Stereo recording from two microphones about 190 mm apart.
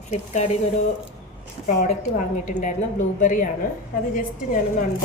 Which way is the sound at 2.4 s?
40° left (ahead or behind).